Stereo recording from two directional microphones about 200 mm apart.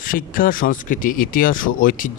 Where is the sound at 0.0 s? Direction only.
45° left (ahead or behind).